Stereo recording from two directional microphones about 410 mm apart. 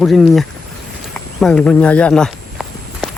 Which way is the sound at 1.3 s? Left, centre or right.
Centre.